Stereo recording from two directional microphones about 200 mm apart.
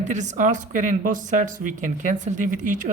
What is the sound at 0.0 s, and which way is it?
Speech, 35° right (ahead or behind).